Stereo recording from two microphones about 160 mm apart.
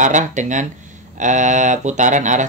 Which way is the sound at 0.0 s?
50° right (ahead or behind).